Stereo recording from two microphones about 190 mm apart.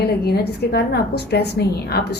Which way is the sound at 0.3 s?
55° left (ahead or behind).